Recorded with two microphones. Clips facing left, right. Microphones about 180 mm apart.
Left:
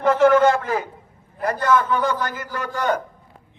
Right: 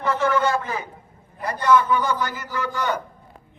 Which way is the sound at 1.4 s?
50° left (ahead or behind).